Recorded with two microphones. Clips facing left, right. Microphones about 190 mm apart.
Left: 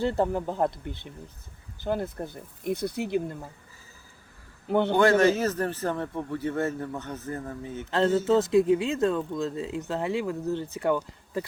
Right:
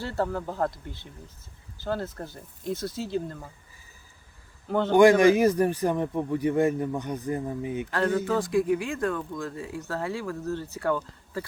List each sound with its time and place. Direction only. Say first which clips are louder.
0.0 s speech: left 4 dB; 20° left (ahead or behind)
1.8 s speech: left 2 dB; 20° left (ahead or behind)
4.9 s a man's voice: right 5 dB; 15° right (ahead or behind)
7.9 s speech: left 4 dB; 25° left (ahead or behind)